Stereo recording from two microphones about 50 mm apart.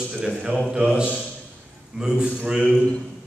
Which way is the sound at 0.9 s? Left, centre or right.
Right.